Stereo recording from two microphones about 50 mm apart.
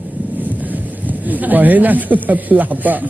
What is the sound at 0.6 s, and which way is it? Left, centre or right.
Speech, right.